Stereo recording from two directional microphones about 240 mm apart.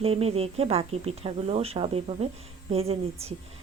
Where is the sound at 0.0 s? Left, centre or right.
Right.